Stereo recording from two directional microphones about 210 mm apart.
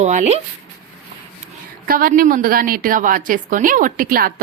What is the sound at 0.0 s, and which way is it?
Speech, 35° right (ahead or behind).